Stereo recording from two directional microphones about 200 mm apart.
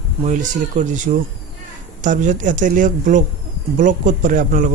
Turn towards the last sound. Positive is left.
turn(degrees=-45)  # may be behind; listen again after turning